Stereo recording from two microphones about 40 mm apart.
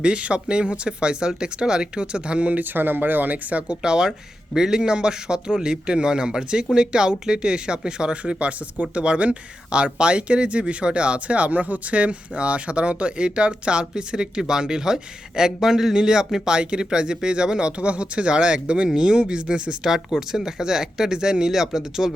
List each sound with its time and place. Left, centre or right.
0.0 s speech: right
2.6 s speech: right
3.8 s speech: centre
19.8 s speech: centre